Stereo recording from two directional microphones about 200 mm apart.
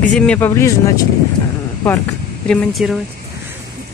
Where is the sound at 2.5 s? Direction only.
Centre (ahead or behind).